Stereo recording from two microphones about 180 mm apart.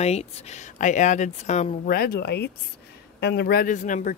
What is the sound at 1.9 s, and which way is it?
Speech, 55° left (ahead or behind).